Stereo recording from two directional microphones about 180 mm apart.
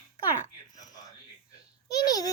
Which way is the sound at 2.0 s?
20° left (ahead or behind).